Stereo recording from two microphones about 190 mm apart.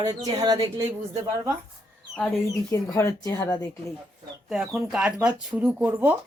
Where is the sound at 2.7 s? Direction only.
15° left (ahead or behind).